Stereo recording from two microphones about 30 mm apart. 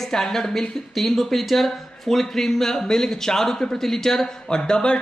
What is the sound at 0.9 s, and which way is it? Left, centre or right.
Speech, centre.